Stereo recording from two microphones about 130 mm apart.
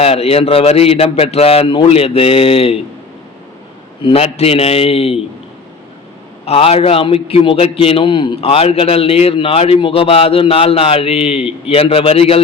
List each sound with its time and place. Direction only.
0.0 s a man's voice: 50° left (ahead or behind)
4.0 s a man's voice: 50° left (ahead or behind)
6.4 s a man's voice: 50° left (ahead or behind)